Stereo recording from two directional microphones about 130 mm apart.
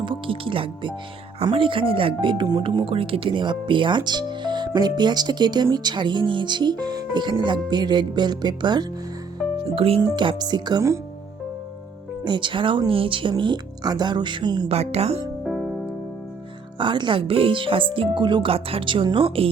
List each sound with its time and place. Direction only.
0.0 s speech: 40° right (ahead or behind)
9.7 s speech: 45° right (ahead or behind)
10.0 s speech: 35° right (ahead or behind)
12.2 s speech: 35° right (ahead or behind)
14.7 s speech: 55° right (ahead or behind)
15.4 s music: 5° right (ahead or behind)
16.7 s speech: 35° right (ahead or behind)